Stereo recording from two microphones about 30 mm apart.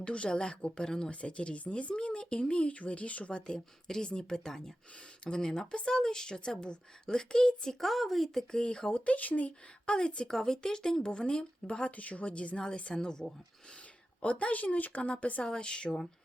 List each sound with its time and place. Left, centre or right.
0.0 s speech: left
1.2 s speech: left
3.4 s speech: left
7.7 s speech: centre
8.6 s speech: left
8.9 s speech: left
9.8 s a woman's voice: left
10.2 s speech: left
11.9 s speech: left
12.9 s speech: left
14.2 s speech: left
15.0 s speech: left
15.4 s speech: left